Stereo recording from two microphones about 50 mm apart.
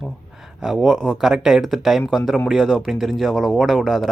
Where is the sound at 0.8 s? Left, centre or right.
Centre.